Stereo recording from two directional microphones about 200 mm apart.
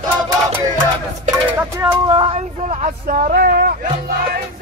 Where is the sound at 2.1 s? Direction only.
30° right (ahead or behind); by 3.7 s 50° right (ahead or behind).